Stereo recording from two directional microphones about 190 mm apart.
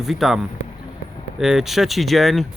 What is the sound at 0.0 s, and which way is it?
Speech, centre (ahead or behind).